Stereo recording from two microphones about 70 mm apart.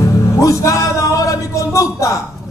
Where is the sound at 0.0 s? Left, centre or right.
Left.